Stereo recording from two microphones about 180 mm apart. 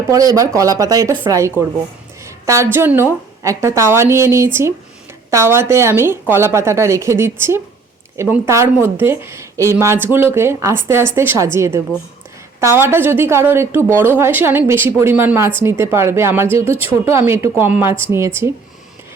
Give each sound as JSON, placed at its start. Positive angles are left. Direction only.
{"t": 0.1, "sound": "a woman's voice", "side_deg": -20}